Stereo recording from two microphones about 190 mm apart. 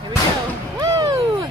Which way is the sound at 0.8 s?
25° right (ahead or behind).